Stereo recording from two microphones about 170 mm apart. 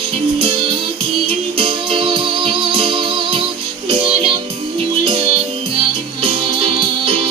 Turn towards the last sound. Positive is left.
turn(degrees=-35)  # may be behind; listen again after turning